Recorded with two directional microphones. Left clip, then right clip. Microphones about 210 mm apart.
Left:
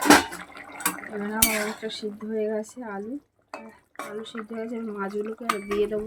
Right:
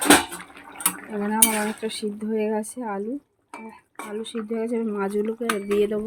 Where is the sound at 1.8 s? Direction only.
40° right (ahead or behind).